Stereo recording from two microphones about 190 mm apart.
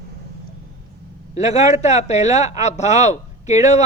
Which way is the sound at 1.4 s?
35° left (ahead or behind).